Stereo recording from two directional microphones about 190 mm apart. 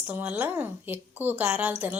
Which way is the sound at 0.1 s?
10° right (ahead or behind).